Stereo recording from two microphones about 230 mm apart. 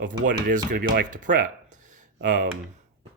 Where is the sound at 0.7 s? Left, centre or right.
Right.